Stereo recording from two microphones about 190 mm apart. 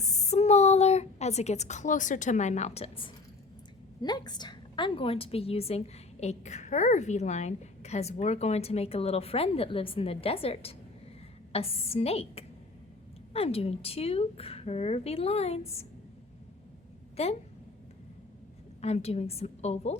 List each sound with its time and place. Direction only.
0.0 s a woman's voice: 35° left (ahead or behind)
17.2 s a woman's voice: 35° left (ahead or behind)
18.8 s a woman's voice: 35° left (ahead or behind)